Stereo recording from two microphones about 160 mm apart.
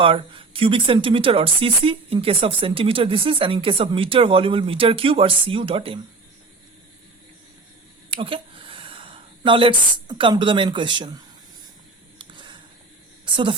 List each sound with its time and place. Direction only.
0.0 s speech: 35° right (ahead or behind)
8.1 s speech: 35° right (ahead or behind)
12.2 s a sound: 30° right (ahead or behind)
13.2 s speech: 30° right (ahead or behind)